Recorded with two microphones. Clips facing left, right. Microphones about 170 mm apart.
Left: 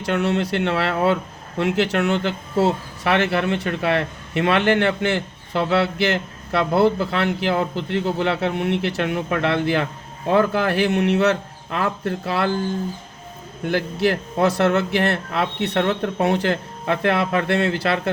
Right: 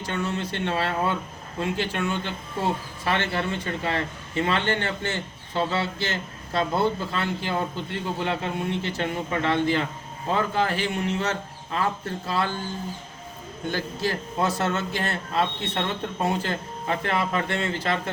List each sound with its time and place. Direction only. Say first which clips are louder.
0.0 s speech: left 8 dB; 75° left (ahead or behind)
14.0 s speech: left 7 dB; 70° left (ahead or behind)